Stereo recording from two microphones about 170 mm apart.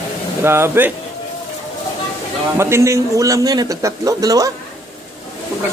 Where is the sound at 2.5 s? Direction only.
15° right (ahead or behind).